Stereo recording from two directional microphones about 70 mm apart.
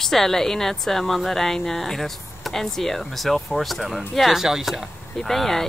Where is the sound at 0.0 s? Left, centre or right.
Centre.